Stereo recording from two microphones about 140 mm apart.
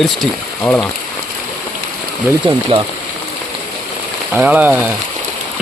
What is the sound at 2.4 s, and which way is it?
Speech, 40° right (ahead or behind).